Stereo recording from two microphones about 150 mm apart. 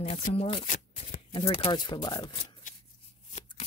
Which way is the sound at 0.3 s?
40° left (ahead or behind).